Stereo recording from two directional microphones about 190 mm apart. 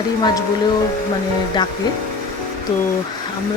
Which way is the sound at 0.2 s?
20° left (ahead or behind).